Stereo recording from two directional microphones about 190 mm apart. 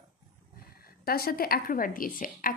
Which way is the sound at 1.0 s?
50° left (ahead or behind).